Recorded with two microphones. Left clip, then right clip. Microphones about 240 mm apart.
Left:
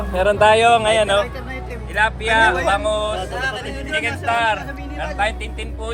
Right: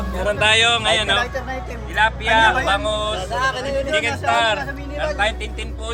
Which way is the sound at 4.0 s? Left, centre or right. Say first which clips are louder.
Left 1 dB; centre.